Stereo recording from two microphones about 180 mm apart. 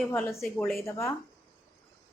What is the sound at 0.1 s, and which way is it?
Speech, 15° left (ahead or behind).